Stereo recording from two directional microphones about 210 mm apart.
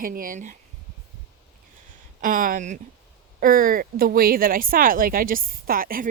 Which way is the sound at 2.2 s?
40° right (ahead or behind).